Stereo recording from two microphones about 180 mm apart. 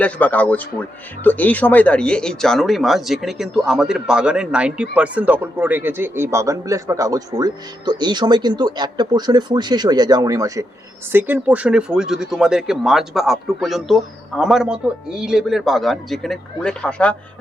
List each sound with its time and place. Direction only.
0.0 s speech: 10° left (ahead or behind)